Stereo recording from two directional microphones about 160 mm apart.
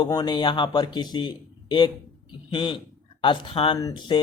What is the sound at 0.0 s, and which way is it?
A man's voice, 25° left (ahead or behind).